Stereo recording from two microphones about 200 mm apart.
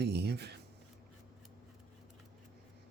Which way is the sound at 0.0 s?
55° right (ahead or behind).